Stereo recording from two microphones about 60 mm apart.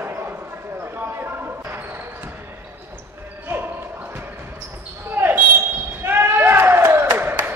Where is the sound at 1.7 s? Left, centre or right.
Right.